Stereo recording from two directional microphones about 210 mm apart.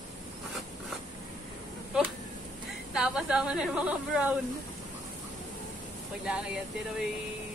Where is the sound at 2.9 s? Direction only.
5° right (ahead or behind).